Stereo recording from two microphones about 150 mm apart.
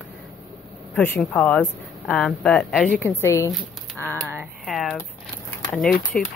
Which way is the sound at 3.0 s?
20° left (ahead or behind).